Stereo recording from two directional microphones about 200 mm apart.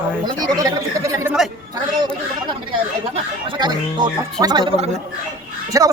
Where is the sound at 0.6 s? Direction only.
15° right (ahead or behind).